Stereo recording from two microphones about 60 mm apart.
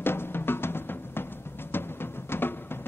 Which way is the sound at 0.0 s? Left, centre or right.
Left.